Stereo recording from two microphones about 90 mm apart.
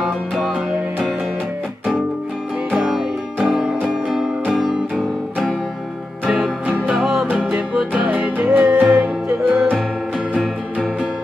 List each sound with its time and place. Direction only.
3.4 s music: 5° right (ahead or behind)
7.5 s music: 15° right (ahead or behind)